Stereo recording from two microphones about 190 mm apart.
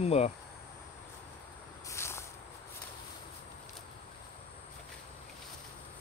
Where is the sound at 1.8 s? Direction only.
15° left (ahead or behind).